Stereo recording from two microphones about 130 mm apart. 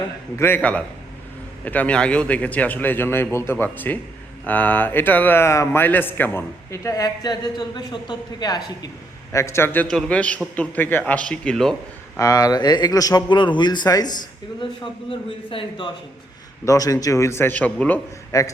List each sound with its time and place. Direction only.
0.3 s a man's voice: 15° left (ahead or behind)
9.8 s speech: 5° left (ahead or behind)
12.1 s speech: 25° left (ahead or behind)
15.4 s speech: 40° left (ahead or behind)
16.6 s a man's voice: 25° left (ahead or behind); by 18.0 s 10° left (ahead or behind)
18.3 s a man's voice: 25° left (ahead or behind)